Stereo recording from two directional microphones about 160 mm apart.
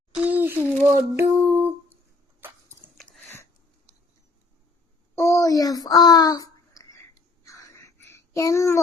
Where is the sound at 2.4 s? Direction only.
10° right (ahead or behind).